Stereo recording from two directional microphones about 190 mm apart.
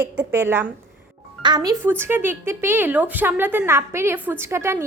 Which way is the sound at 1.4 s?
20° right (ahead or behind).